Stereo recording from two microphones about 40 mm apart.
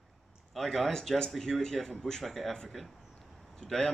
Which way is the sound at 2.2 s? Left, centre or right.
Centre.